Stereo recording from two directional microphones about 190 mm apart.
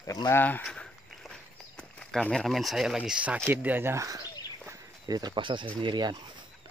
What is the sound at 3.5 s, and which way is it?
Speech, 10° right (ahead or behind).